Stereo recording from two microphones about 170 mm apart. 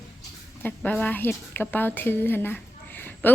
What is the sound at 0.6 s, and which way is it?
A woman's voice, 10° left (ahead or behind).